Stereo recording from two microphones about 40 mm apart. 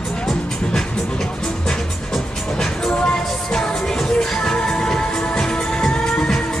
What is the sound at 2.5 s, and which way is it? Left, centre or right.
Music, centre.